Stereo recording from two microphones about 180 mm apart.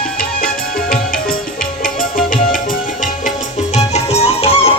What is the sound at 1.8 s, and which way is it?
Tabla, 50° left (ahead or behind).